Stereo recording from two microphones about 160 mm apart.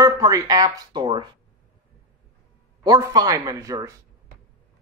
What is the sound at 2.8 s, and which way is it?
A man's voice, 25° right (ahead or behind).